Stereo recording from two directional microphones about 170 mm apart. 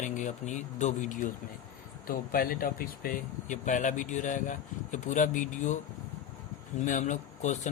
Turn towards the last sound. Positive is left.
turn(degrees=45)  # may be behind; listen again after turning